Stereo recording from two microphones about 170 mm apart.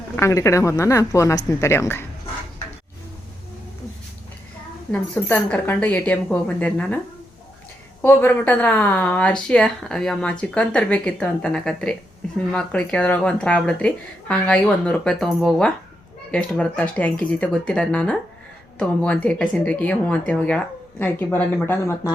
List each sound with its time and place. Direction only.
0.2 s speech: 15° left (ahead or behind)
4.9 s speech: 10° left (ahead or behind)
8.0 s speech: 10° left (ahead or behind)